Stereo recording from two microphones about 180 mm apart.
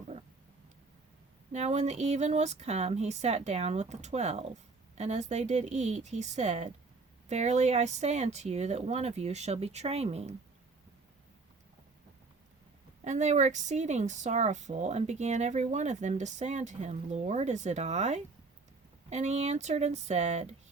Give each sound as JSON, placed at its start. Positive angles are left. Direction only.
{"t": 1.5, "sound": "speech", "side_deg": -40}
{"t": 13.1, "sound": "speech", "side_deg": -40}